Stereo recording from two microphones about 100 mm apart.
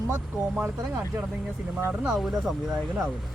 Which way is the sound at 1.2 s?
10° right (ahead or behind).